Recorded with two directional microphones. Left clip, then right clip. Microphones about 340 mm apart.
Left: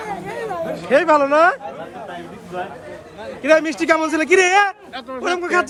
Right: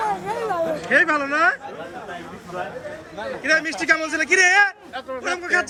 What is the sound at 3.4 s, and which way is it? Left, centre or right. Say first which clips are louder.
Speech: left 5 dB; centre.